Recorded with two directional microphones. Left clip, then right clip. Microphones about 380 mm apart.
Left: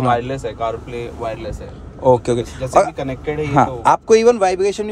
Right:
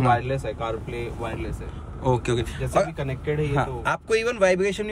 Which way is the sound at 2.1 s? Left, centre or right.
Centre.